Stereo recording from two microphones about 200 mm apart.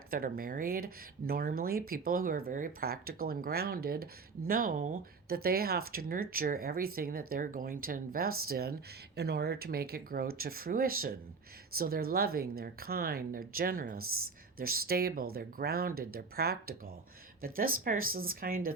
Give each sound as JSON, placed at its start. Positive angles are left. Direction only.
{"t": 0.1, "sound": "speech", "side_deg": -45}